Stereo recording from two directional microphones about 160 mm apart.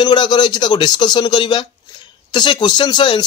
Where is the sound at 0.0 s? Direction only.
30° left (ahead or behind).